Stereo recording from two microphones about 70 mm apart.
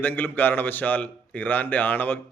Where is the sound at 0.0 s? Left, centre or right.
Left.